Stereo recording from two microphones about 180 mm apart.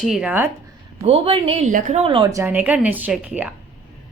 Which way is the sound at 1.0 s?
35° right (ahead or behind).